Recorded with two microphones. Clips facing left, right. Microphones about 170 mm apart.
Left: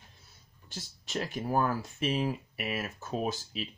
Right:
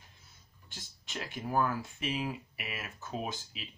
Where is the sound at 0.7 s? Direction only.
40° left (ahead or behind).